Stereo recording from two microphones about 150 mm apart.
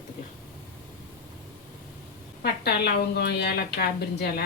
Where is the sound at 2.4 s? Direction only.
90° left.